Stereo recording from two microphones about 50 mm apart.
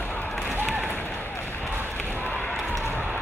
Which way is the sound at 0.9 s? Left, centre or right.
Left.